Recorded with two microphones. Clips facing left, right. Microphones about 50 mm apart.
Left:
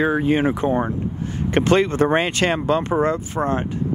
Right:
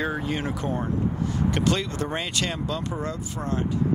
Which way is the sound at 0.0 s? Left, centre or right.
Left.